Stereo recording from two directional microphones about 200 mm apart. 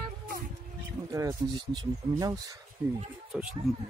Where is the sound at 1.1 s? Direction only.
15° right (ahead or behind).